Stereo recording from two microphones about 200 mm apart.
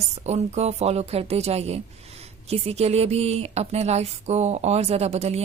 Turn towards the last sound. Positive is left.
turn(degrees=-30)  # may be behind; listen again after turning